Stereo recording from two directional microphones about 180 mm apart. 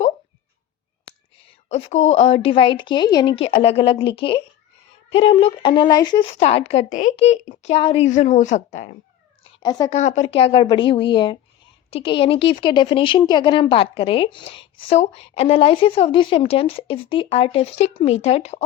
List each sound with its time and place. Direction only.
2.0 s a woman's voice: 35° left (ahead or behind)
6.4 s a woman's voice: 35° left (ahead or behind)
9.6 s a woman's voice: 20° left (ahead or behind)
9.9 s a woman's voice: 40° left (ahead or behind)